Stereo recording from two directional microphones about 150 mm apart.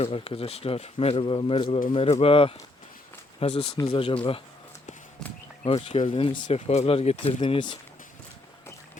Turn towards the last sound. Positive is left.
turn(degrees=35)  # may be behind; listen again after turning